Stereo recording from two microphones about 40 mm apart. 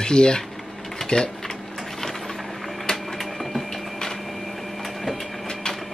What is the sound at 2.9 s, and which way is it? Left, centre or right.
Printer, centre.